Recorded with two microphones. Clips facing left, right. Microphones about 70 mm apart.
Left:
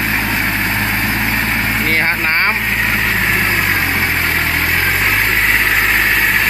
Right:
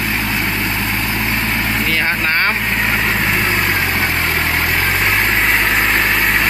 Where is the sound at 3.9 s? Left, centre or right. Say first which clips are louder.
Left 1 dB; left.